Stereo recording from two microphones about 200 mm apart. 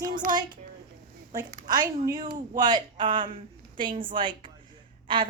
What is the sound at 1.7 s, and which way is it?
Speech, 20° right (ahead or behind).